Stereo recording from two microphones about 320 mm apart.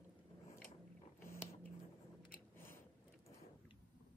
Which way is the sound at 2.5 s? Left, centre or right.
Centre.